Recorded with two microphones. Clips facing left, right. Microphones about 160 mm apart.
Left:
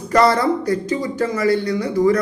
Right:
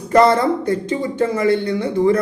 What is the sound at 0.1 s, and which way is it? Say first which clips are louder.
A man's voice: right 2 dB; 25° right (ahead or behind).